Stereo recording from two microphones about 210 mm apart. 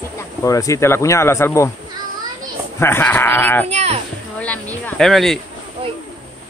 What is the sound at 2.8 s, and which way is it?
Speech, 10° left (ahead or behind).